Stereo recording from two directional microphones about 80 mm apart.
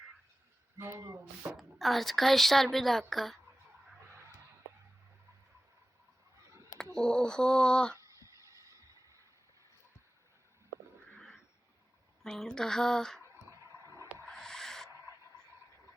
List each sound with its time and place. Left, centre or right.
0.8 s speech: right
1.0 s speech: right
1.5 s speech: centre
6.9 s speech: centre
8.7 s a sound: right
12.2 s speech: centre
13.2 s a sound: right
14.3 s owl: centre
14.8 s owl: right